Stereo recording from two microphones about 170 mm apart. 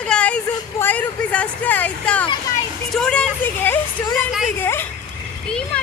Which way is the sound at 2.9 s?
5° left (ahead or behind).